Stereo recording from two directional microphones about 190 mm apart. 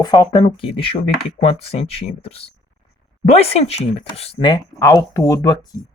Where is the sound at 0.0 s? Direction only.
20° left (ahead or behind).